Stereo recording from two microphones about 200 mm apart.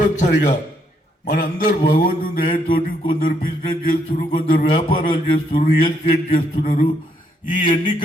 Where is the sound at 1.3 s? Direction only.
45° left (ahead or behind).